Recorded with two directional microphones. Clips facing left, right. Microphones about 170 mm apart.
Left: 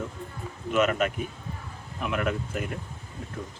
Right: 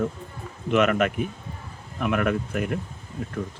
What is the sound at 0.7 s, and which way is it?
Speech, 60° right (ahead or behind).